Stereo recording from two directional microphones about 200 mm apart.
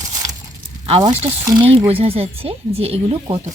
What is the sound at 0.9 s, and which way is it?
Speech, 25° right (ahead or behind).